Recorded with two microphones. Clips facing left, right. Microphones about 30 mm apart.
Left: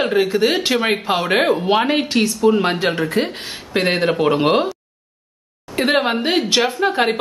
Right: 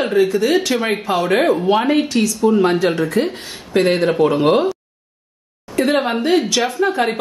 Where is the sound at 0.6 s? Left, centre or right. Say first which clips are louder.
Left 1 dB; left.